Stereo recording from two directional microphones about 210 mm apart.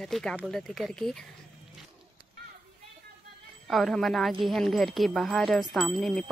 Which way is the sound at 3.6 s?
Centre (ahead or behind).